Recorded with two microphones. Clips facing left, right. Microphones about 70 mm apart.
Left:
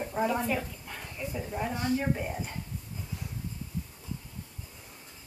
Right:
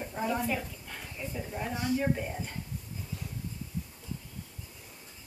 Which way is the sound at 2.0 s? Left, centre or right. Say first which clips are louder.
Even; centre.